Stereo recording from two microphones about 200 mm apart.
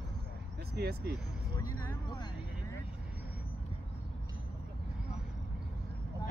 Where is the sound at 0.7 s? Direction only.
55° right (ahead or behind).